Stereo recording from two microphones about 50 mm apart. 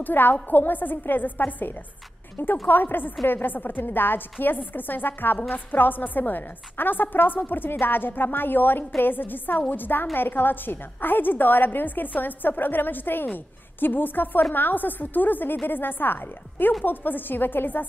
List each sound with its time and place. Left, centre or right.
0.0 s a woman's voice: left
2.3 s a woman's voice: left